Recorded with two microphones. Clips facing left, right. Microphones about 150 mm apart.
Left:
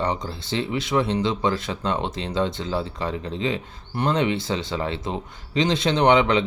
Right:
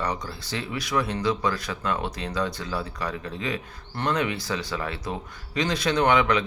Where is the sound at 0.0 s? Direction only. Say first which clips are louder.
Left 4 dB; 25° left (ahead or behind).